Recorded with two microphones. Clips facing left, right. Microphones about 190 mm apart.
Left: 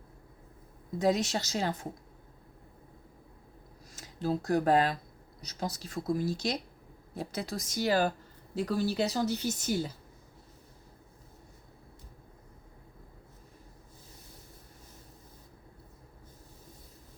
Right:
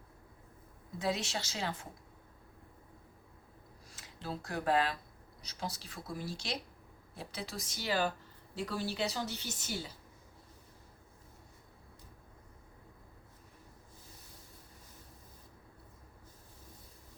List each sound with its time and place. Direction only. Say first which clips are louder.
0.9 s speech: left 8 dB; 40° left (ahead or behind)
3.9 s speech: left 10 dB; 40° left (ahead or behind)